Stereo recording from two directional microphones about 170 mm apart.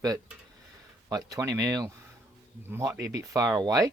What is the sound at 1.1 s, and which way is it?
Speech, 20° right (ahead or behind).